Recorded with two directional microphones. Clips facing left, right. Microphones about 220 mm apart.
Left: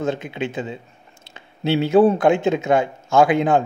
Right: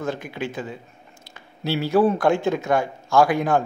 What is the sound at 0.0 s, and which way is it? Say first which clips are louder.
A man's voice: left 4 dB; 20° left (ahead or behind).